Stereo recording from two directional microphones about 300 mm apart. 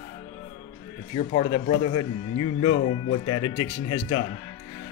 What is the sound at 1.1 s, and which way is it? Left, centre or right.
Speech, centre.